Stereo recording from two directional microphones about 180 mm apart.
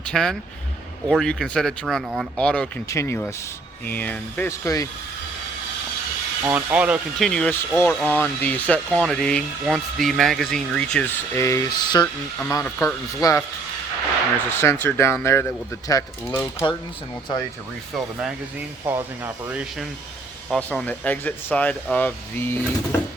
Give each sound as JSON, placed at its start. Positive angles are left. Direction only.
{"t": 0.0, "sound": "speech", "side_deg": 5}
{"t": 6.4, "sound": "speech", "side_deg": -10}
{"t": 7.3, "sound": "speech", "side_deg": 5}
{"t": 11.3, "sound": "speech", "side_deg": 15}
{"t": 14.6, "sound": "speech", "side_deg": 15}
{"t": 17.9, "sound": "speech", "side_deg": -5}
{"t": 20.5, "sound": "speech", "side_deg": 5}